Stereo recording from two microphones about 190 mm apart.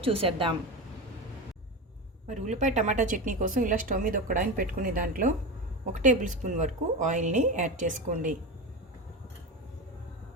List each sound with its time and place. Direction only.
0.0 s a woman's voice: 30° right (ahead or behind)
2.2 s speech: 40° right (ahead or behind)